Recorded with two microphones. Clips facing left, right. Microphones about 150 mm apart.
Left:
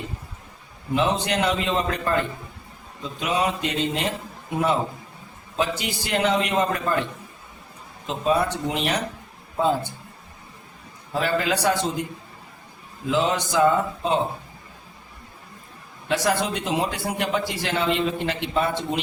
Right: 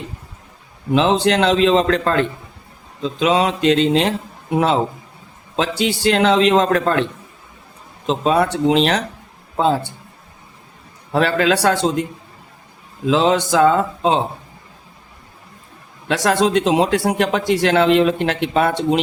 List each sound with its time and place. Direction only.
0.9 s a man's voice: 90° right
8.0 s a man's voice: 85° right
9.6 s a man's voice: 80° right
11.1 s a man's voice: 70° right (ahead or behind); by 12.0 s 90° right
13.1 s a man's voice: 90° right
16.0 s speech: 80° right